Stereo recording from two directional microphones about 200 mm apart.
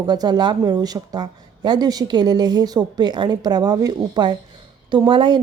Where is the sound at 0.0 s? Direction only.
20° right (ahead or behind).